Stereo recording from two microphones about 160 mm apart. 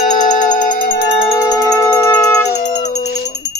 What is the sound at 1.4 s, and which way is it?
Music, 25° left (ahead or behind).